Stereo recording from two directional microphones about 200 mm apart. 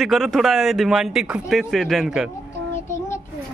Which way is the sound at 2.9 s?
15° left (ahead or behind).